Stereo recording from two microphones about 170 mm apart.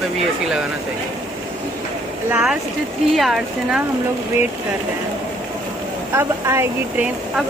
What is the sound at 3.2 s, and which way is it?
Speech, centre (ahead or behind).